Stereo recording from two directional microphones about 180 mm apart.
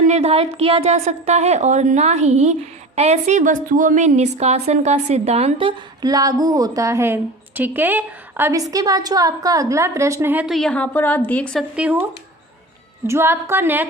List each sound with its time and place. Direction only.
0.0 s a woman's voice: 40° right (ahead or behind); by 11.6 s 10° left (ahead or behind)
11.8 s speech: 10° right (ahead or behind)
13.1 s speech: 15° right (ahead or behind)